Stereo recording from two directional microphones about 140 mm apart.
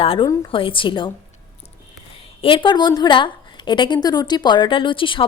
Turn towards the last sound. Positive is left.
turn(degrees=35)  # may be behind; listen again after turning